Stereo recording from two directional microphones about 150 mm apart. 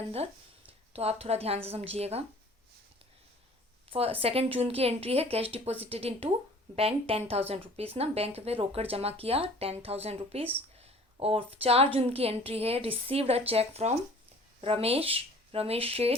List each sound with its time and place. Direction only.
0.9 s a woman's voice: 40° right (ahead or behind)
3.8 s speech: 40° right (ahead or behind)